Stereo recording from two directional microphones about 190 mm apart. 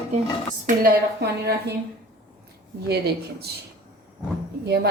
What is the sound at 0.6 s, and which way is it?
A woman's voice, 50° right (ahead or behind).